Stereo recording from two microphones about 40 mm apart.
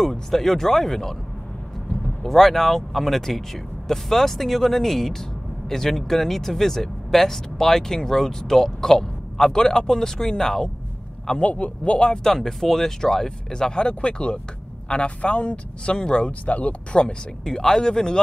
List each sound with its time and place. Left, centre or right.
0.0 s speech: centre
2.2 s speech: centre
11.3 s speech: left
12.1 s speech: centre; by 17.1 s left
17.5 s speech: centre